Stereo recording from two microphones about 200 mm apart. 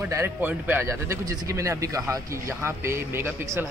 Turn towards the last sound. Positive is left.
turn(degrees=-10)  # may be behind; listen again after turning